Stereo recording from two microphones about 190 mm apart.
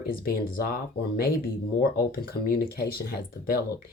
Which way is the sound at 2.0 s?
50° left (ahead or behind).